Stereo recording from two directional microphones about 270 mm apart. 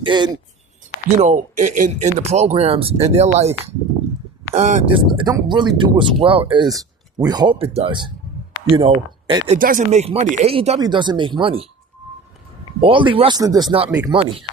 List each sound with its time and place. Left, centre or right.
0.0 s speech: centre
1.2 s speech: right
12.8 s speech: centre